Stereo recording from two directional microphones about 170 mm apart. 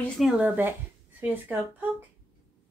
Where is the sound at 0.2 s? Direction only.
10° right (ahead or behind).